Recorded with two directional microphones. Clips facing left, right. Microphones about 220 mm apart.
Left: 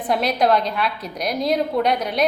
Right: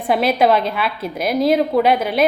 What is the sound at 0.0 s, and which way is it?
Speech, 5° right (ahead or behind).